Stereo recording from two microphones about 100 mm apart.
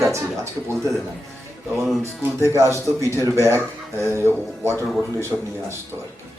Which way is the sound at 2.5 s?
30° right (ahead or behind).